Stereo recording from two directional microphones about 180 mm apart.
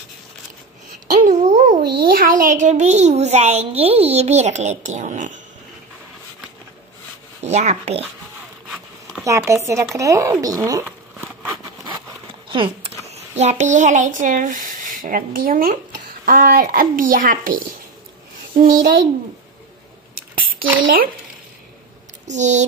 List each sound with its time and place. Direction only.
1.2 s a sound: 40° right (ahead or behind)
1.8 s a child's voice: 55° right (ahead or behind)
7.4 s a child's voice: 40° right (ahead or behind)
9.2 s speech: 15° right (ahead or behind)
12.4 s a sound: 25° right (ahead or behind)
13.4 s speech: 40° right (ahead or behind)
18.6 s speech: 50° right (ahead or behind)
22.3 s a child's voice: 40° right (ahead or behind)